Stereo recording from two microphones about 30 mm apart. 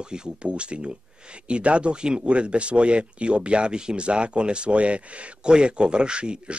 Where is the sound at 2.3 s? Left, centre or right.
Right.